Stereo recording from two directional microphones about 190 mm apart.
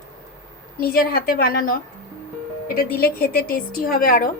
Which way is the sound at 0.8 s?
50° left (ahead or behind).